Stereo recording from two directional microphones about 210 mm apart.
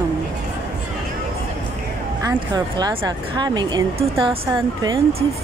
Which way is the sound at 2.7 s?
20° right (ahead or behind).